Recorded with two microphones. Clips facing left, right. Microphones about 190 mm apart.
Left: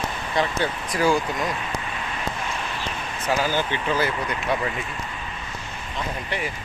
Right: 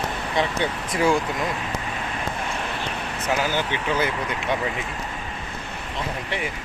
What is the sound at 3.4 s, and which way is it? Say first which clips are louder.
Speech: even; 15° right (ahead or behind).